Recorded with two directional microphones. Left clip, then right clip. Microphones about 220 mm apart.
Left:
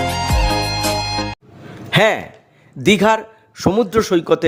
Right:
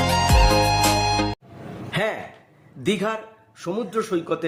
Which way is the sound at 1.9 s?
45° left (ahead or behind).